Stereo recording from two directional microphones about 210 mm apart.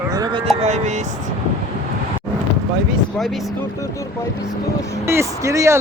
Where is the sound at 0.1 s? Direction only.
20° right (ahead or behind).